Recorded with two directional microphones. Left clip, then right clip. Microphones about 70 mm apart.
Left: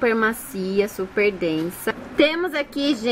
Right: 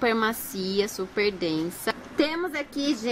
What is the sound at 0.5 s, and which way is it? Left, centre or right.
Speech, left.